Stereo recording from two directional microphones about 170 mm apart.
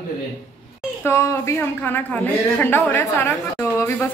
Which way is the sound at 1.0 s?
15° left (ahead or behind).